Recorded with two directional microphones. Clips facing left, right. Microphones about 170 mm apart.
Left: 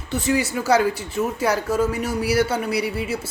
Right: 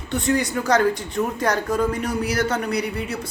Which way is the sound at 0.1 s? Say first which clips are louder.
Even; centre (ahead or behind).